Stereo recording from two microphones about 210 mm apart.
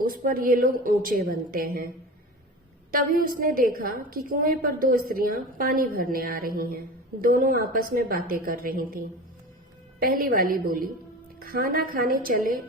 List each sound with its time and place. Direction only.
0.0 s a woman's voice: 45° right (ahead or behind)
2.9 s a woman's voice: 45° right (ahead or behind)